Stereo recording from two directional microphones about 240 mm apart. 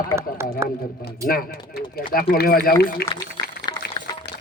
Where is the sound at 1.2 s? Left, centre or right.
Left.